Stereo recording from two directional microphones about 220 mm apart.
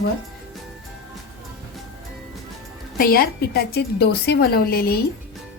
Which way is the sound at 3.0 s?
45° left (ahead or behind).